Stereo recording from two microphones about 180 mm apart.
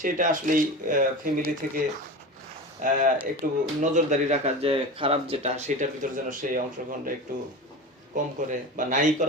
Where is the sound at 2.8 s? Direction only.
45° right (ahead or behind).